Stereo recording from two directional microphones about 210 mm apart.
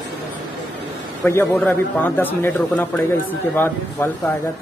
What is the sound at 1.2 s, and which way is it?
A man's voice, 10° left (ahead or behind).